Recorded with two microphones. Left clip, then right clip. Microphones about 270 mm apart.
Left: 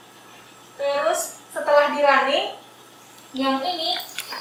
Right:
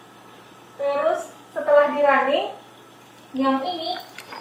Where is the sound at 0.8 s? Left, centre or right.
Centre.